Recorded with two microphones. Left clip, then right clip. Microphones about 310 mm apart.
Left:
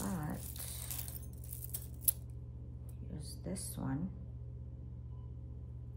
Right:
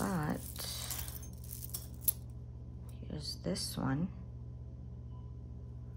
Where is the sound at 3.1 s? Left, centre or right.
Right.